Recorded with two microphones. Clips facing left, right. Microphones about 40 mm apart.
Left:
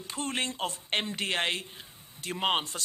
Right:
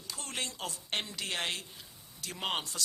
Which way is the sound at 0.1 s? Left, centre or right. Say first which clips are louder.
Left 7 dB; left.